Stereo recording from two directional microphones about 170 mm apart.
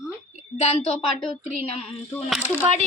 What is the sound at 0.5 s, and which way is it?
Speech, 40° left (ahead or behind).